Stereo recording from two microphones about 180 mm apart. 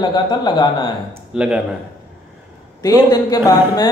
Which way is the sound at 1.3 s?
5° right (ahead or behind).